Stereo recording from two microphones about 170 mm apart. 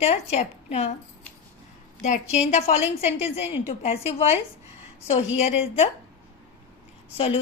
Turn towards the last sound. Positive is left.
turn(degrees=35)  # may be behind; listen again after turning